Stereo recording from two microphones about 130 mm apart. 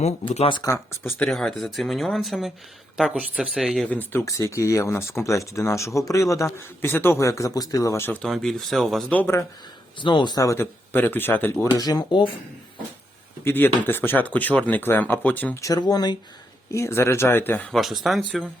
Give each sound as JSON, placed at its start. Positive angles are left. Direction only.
{"t": 0.3, "sound": "speech", "side_deg": 45}
{"t": 0.6, "sound": "speech", "side_deg": 25}
{"t": 1.2, "sound": "speech", "side_deg": 5}
{"t": 3.8, "sound": "speech", "side_deg": 15}
{"t": 8.2, "sound": "speech", "side_deg": 5}
{"t": 9.1, "sound": "speech", "side_deg": 20}
{"t": 10.0, "sound": "speech", "side_deg": 35}
{"t": 11.8, "sound": "speech", "side_deg": 30}
{"t": 13.4, "sound": "speech", "side_deg": 15}
{"t": 15.6, "sound": "speech", "side_deg": 30}
{"t": 16.7, "sound": "speech", "side_deg": 20}
{"t": 17.7, "sound": "speech", "side_deg": 0}